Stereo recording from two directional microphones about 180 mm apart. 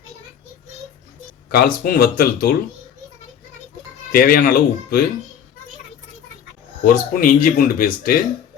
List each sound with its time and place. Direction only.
1.5 s speech: 55° left (ahead or behind)
4.1 s speech: 55° left (ahead or behind)
6.8 s speech: 50° left (ahead or behind)